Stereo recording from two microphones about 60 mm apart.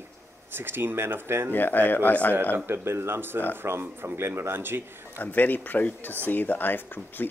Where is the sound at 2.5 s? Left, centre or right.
Right.